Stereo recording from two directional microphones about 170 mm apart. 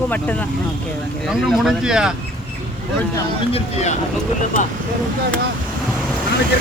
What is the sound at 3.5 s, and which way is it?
Speech, 35° left (ahead or behind).